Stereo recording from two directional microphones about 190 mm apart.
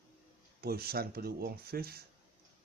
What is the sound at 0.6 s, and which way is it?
Speech, 55° right (ahead or behind).